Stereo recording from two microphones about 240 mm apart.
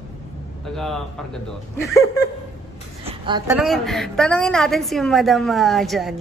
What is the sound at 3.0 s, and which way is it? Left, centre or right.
Speech, centre.